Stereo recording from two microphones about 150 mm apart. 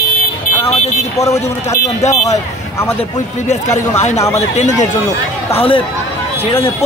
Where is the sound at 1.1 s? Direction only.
20° left (ahead or behind).